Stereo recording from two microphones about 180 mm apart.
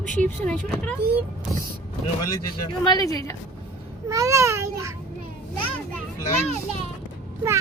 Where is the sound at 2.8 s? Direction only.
20° left (ahead or behind).